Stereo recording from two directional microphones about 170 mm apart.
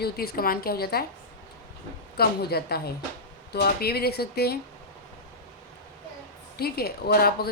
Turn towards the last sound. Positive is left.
turn(degrees=65)  # may be behind; listen again after turning